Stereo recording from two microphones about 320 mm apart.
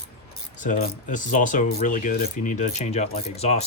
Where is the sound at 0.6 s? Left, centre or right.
Left.